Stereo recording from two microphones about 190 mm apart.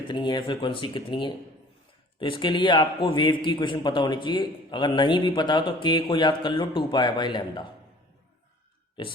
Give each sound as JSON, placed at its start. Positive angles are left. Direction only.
{"t": 0.1, "sound": "a man's voice", "side_deg": 25}